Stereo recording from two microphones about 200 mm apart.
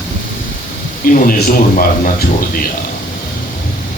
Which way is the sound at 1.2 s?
50° left (ahead or behind).